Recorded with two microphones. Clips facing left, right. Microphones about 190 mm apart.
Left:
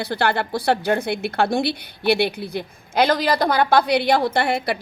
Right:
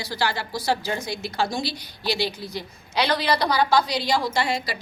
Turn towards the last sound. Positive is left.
turn(degrees=60)  # may be behind; listen again after turning